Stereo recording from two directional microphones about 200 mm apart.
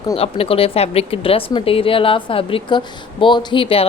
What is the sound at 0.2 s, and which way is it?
A woman's voice, 30° left (ahead or behind).